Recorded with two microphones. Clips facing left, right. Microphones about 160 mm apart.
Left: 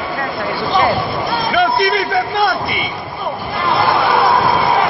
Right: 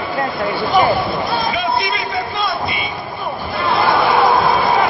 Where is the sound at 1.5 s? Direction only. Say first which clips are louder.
Left 5 dB; 60° left (ahead or behind).